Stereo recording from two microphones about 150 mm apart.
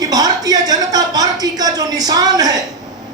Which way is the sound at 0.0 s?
25° right (ahead or behind).